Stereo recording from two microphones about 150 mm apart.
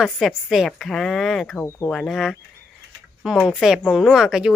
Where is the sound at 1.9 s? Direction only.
Centre (ahead or behind).